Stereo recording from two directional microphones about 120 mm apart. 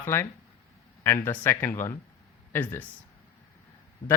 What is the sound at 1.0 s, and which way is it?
Speech, 20° left (ahead or behind).